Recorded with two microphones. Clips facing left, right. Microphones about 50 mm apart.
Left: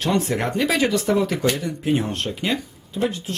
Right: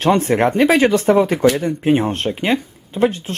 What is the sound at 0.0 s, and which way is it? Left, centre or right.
Speech, right.